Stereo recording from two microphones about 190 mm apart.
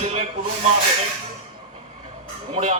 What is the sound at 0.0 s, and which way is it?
Snake, 35° right (ahead or behind).